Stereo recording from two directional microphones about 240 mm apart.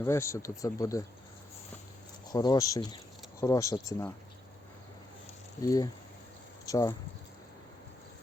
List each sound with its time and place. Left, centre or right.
0.0 s speech: centre
2.3 s speech: centre
5.6 s speech: centre